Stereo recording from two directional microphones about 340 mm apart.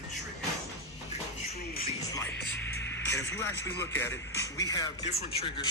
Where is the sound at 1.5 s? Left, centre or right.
Left.